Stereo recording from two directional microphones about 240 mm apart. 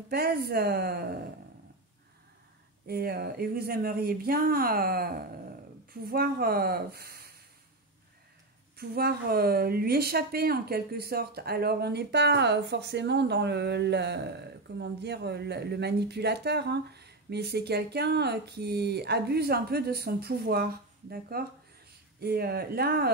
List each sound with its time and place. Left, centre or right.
0.1 s speech: right
2.9 s speech: right
8.7 s speech: right